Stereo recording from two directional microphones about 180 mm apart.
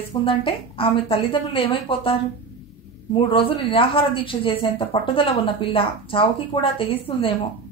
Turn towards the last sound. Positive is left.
turn(degrees=30)  # may be behind; listen again after turning